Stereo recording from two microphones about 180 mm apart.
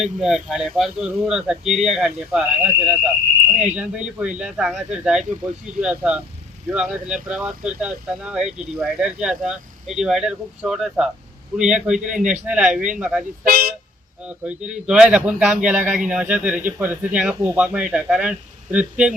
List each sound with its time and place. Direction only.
0.0 s speech: 5° right (ahead or behind)
13.4 s speech: 55° right (ahead or behind)
14.3 s speech: 5° right (ahead or behind)